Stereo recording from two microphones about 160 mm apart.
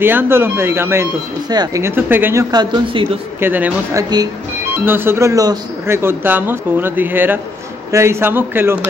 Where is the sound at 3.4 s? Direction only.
10° right (ahead or behind).